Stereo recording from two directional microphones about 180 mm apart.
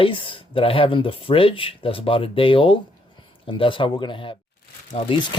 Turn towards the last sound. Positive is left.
turn(degrees=30)  # may be behind; listen again after turning